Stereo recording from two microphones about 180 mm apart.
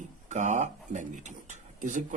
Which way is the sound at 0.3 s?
40° right (ahead or behind).